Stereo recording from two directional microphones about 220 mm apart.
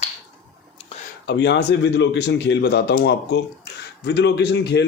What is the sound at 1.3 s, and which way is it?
Speech, 50° left (ahead or behind).